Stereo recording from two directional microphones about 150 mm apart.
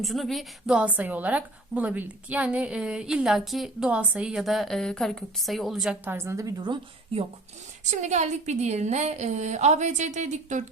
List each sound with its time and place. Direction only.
0.0 s a woman's voice: centre (ahead or behind); by 7.3 s 35° right (ahead or behind)
7.9 s a woman's voice: 50° right (ahead or behind)